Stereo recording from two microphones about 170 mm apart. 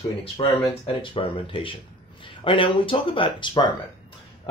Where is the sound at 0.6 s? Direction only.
30° left (ahead or behind).